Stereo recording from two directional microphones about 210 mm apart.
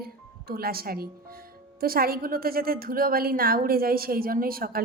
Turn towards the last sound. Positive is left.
turn(degrees=-45)  # may be behind; listen again after turning